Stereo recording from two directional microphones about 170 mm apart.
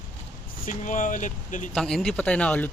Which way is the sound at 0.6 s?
50° left (ahead or behind).